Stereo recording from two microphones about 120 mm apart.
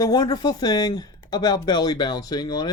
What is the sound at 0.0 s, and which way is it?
Speech, 35° left (ahead or behind).